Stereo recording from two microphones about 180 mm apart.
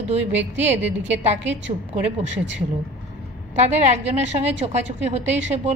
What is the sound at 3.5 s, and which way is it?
A woman's voice, 40° right (ahead or behind).